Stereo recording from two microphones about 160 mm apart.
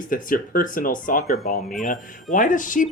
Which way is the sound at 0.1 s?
60° left (ahead or behind).